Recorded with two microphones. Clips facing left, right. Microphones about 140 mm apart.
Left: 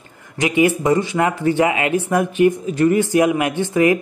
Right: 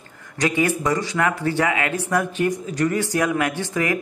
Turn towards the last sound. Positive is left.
turn(degrees=20)  # may be behind; listen again after turning